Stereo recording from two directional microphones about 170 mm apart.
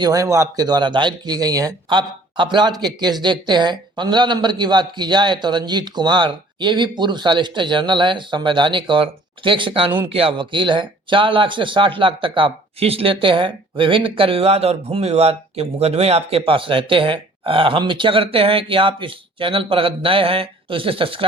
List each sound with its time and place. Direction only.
0.0 s speech: 20° right (ahead or behind)